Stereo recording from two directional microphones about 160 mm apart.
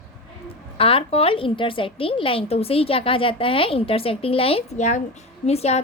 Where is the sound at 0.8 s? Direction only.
35° left (ahead or behind).